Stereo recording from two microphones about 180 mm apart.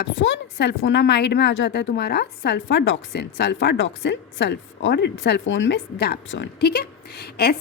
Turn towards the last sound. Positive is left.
turn(degrees=60)  # may be behind; listen again after turning